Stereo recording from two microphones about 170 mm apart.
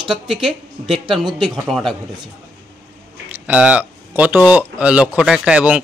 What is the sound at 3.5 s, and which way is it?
Speech, 5° right (ahead or behind).